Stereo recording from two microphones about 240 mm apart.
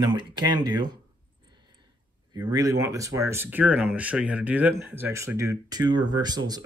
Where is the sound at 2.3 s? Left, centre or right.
Centre.